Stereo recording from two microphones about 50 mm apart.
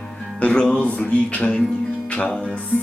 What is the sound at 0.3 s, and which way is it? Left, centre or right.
Speech, left.